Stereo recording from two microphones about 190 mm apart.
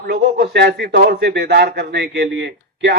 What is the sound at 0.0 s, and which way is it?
Speech, 60° right (ahead or behind).